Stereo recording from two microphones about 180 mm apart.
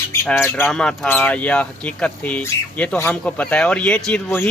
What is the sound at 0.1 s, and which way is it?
Speech, 15° left (ahead or behind).